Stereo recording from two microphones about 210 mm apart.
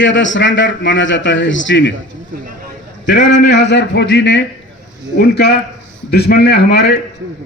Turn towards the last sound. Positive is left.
turn(degrees=50)  # may be behind; listen again after turning